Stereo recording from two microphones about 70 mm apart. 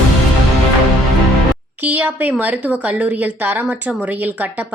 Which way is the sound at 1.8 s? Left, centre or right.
Right.